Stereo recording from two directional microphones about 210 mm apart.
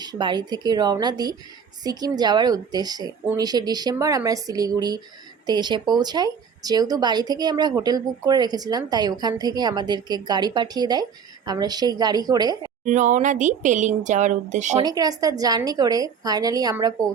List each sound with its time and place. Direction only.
0.0 s speech: 20° right (ahead or behind)
12.8 s speech: 35° right (ahead or behind)
14.8 s a woman's voice: 15° right (ahead or behind)